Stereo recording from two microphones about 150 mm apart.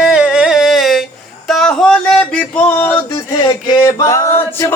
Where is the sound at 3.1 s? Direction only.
25° left (ahead or behind).